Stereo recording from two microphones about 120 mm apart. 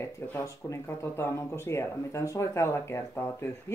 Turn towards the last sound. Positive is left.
turn(degrees=20)  # may be behind; listen again after turning